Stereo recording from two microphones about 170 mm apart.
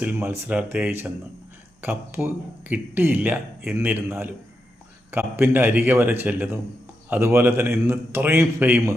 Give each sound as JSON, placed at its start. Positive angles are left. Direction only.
{"t": 0.0, "sound": "speech", "side_deg": -10}